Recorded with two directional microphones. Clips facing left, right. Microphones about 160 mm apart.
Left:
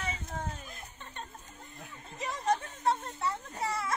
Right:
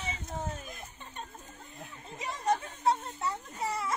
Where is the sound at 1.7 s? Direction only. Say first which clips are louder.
Right 1 dB; 10° right (ahead or behind).